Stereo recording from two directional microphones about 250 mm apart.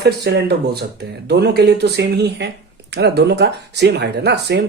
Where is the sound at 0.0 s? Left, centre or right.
Right.